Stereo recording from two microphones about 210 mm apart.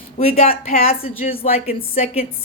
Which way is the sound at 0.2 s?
30° left (ahead or behind).